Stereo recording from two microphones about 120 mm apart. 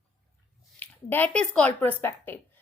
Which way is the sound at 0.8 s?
15° left (ahead or behind).